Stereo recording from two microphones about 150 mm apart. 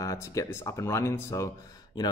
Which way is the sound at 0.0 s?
20° left (ahead or behind).